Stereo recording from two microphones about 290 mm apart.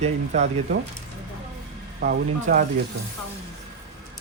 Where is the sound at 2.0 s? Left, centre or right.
Right.